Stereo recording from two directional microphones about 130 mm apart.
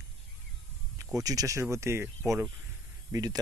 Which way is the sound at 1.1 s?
25° right (ahead or behind).